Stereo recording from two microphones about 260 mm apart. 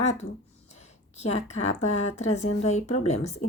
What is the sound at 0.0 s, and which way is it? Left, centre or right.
Speech, left.